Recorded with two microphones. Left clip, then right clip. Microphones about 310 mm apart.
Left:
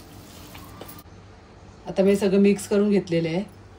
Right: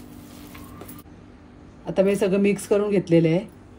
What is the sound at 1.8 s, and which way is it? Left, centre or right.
Speech, right.